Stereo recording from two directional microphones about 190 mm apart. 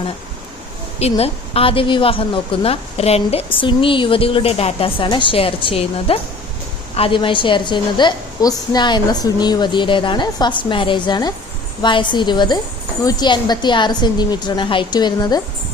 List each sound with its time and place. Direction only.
0.9 s a woman's voice: 30° left (ahead or behind)